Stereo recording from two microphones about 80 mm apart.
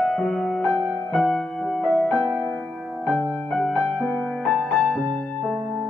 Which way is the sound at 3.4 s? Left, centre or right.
Centre.